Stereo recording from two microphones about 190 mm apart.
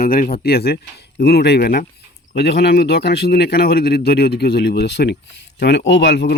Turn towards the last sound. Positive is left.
turn(degrees=65)  # may be behind; listen again after turning